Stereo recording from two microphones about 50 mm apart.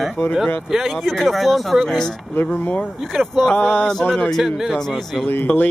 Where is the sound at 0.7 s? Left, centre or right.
Centre.